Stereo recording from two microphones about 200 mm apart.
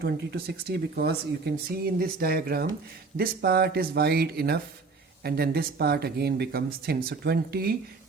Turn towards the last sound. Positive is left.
turn(degrees=-50)  # may be behind; listen again after turning